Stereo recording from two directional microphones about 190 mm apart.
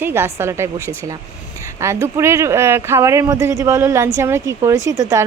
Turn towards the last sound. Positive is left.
turn(degrees=-15)  # may be behind; listen again after turning